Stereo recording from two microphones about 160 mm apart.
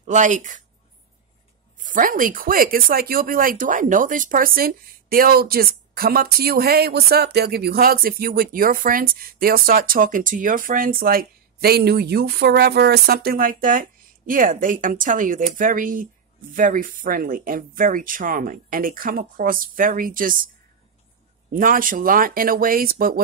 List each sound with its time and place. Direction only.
0.0 s a woman's voice: 50° right (ahead or behind)
1.8 s speech: 55° right (ahead or behind)
21.5 s speech: 60° right (ahead or behind)